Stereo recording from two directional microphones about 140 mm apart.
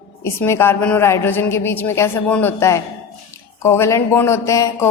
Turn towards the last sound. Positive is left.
turn(degrees=20)  # may be behind; listen again after turning